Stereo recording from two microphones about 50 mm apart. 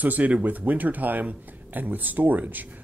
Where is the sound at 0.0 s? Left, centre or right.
Right.